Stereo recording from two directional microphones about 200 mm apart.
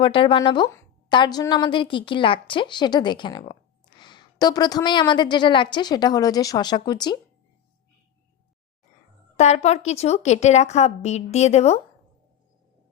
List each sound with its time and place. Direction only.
0.0 s a woman's voice: 25° left (ahead or behind)
9.4 s a woman's voice: 35° left (ahead or behind)